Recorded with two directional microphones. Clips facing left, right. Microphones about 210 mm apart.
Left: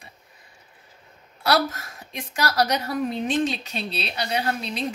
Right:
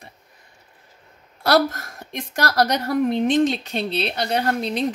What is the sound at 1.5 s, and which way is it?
A woman's voice, 55° right (ahead or behind).